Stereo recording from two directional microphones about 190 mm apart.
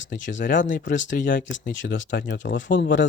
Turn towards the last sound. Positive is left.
turn(degrees=65)  # may be behind; listen again after turning